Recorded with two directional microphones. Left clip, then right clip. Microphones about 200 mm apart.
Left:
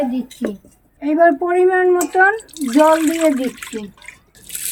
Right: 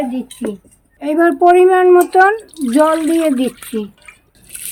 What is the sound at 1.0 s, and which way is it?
Speech, 60° right (ahead or behind).